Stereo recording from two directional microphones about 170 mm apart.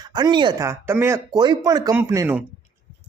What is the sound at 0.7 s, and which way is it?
Speech, 15° right (ahead or behind).